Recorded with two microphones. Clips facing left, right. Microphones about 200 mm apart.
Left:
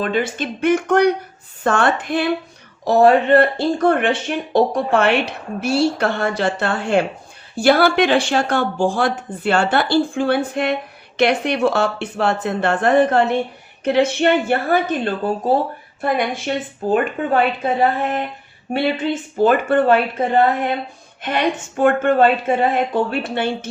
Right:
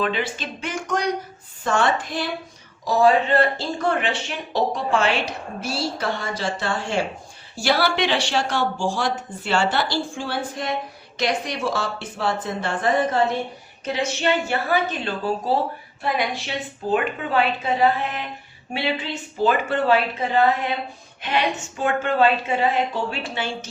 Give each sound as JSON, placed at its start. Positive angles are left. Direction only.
{"t": 0.0, "sound": "a woman's voice", "side_deg": 50}
{"t": 21.2, "sound": "music", "side_deg": 50}
{"t": 21.5, "sound": "a woman's voice", "side_deg": 60}